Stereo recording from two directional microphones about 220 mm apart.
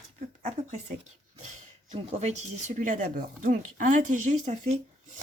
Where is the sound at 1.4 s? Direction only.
35° right (ahead or behind).